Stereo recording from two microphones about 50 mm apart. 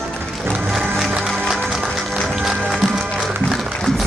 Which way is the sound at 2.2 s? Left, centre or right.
Centre.